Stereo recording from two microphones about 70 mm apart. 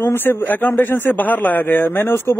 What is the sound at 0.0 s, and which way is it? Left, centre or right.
A man's voice, left.